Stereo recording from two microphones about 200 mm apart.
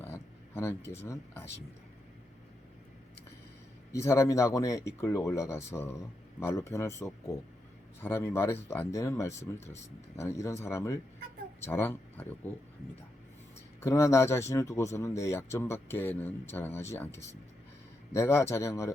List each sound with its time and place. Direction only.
0.0 s a sound: 10° left (ahead or behind)
1.0 s speech: 10° left (ahead or behind)
3.9 s speech: 15° left (ahead or behind)
13.8 s speech: 15° left (ahead or behind)